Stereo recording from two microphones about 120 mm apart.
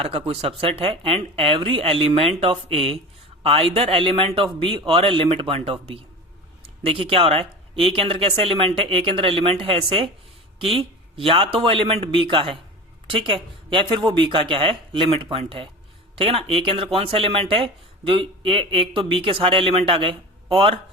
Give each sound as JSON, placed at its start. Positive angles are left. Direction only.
{"t": 0.0, "sound": "speech", "side_deg": -55}